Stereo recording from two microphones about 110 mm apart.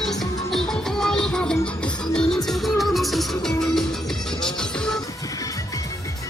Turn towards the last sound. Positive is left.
turn(degrees=5)  # may be behind; listen again after turning